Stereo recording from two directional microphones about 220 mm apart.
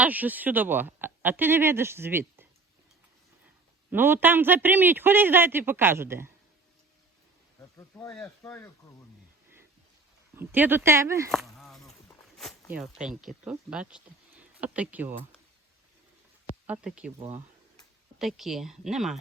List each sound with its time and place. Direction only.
0.0 s speech: 5° right (ahead or behind)
3.9 s speech: 10° right (ahead or behind)
7.8 s speech: 15° left (ahead or behind)
10.3 s speech: 10° right (ahead or behind)
11.3 s a sound: centre (ahead or behind)
12.8 s speech: centre (ahead or behind)
16.6 s speech: 5° right (ahead or behind)
17.2 s speech: 30° right (ahead or behind)
18.2 s speech: centre (ahead or behind)